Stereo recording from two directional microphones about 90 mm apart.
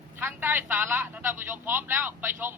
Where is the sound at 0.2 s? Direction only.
20° right (ahead or behind).